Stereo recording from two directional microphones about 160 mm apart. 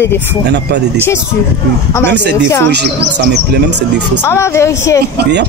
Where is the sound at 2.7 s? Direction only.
90° right.